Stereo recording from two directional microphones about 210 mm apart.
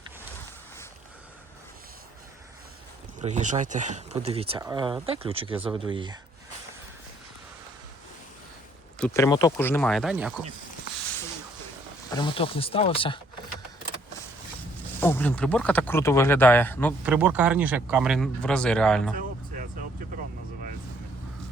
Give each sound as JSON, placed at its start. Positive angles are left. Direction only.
{"t": 3.2, "sound": "speech", "side_deg": -35}
{"t": 9.0, "sound": "speech", "side_deg": 10}
{"t": 12.1, "sound": "speech", "side_deg": 25}
{"t": 15.0, "sound": "speech", "side_deg": 10}
{"t": 17.0, "sound": "speech", "side_deg": -5}